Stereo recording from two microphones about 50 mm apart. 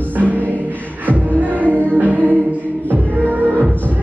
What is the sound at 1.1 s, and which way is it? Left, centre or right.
Music, right.